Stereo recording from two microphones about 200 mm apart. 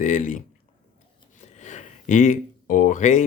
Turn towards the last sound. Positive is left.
turn(degrees=40)  # may be behind; listen again after turning